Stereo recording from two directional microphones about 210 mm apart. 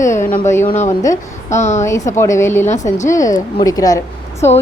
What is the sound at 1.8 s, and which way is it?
A woman's voice, 15° left (ahead or behind).